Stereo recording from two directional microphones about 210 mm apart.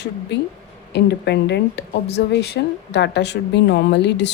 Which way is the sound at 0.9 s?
55° left (ahead or behind).